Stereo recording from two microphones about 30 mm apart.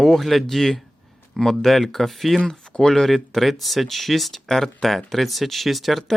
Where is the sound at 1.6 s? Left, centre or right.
Centre.